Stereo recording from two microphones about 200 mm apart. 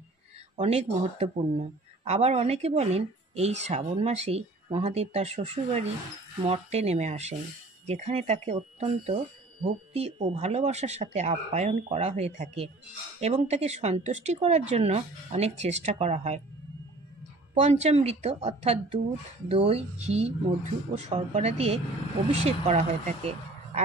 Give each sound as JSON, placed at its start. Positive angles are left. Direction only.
{"t": 0.6, "sound": "speech", "side_deg": -30}
{"t": 17.6, "sound": "speech", "side_deg": -35}